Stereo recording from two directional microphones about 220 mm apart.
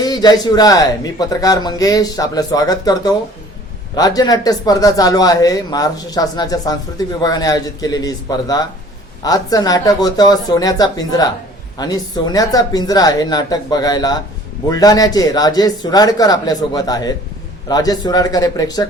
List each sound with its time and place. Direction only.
0.0 s a man's voice: 20° left (ahead or behind)